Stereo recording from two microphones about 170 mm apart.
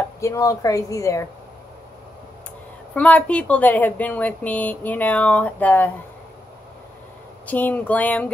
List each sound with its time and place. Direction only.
0.2 s a woman's voice: 20° left (ahead or behind)
2.9 s speech: 10° left (ahead or behind)
7.4 s speech: 10° left (ahead or behind)